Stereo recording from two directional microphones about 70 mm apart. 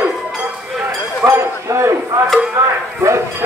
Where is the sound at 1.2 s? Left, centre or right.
Right.